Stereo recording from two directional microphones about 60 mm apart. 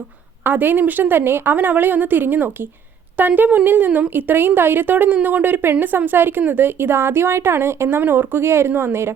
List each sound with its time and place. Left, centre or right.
0.4 s a woman's voice: right